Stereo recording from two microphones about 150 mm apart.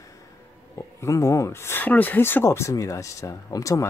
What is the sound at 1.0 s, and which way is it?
Speech, 20° left (ahead or behind).